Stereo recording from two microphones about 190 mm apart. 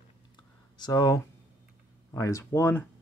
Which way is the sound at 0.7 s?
20° left (ahead or behind).